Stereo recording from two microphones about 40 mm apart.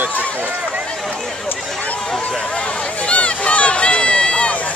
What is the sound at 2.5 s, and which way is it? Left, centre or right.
Run, left.